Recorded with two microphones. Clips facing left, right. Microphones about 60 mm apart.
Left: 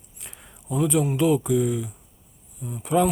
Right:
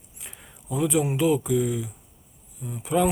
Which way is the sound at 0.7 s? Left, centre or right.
Centre.